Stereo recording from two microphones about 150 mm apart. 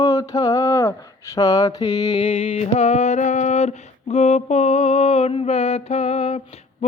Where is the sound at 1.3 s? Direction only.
25° left (ahead or behind).